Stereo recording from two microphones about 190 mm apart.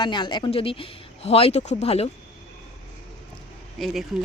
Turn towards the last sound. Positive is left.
turn(degrees=0)  # may be behind; listen again after turning